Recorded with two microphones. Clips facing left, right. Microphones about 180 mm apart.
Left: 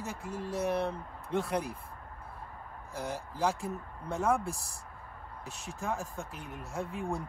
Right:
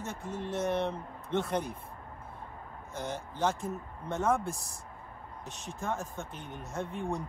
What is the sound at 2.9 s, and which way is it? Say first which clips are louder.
Speech: even; centre (ahead or behind).